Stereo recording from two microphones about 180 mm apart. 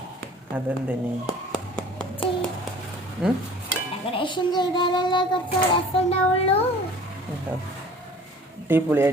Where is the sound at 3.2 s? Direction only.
5° right (ahead or behind).